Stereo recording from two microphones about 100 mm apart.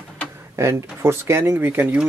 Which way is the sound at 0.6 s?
25° right (ahead or behind).